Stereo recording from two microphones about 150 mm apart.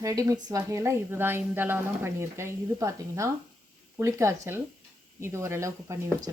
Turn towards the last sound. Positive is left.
turn(degrees=-20)  # may be behind; listen again after turning